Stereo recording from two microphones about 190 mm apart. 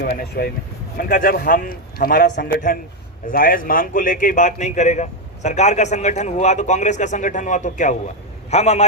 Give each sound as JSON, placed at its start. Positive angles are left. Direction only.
{"t": 0.0, "sound": "a man's voice", "side_deg": 50}